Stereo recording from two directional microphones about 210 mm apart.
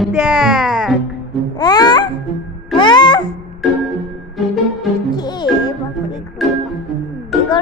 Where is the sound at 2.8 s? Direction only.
20° left (ahead or behind).